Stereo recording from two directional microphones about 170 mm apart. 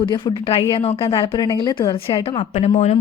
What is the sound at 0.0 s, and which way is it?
A woman's voice, 25° left (ahead or behind).